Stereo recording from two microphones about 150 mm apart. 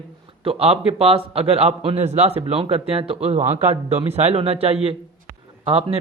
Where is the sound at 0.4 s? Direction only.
45° right (ahead or behind).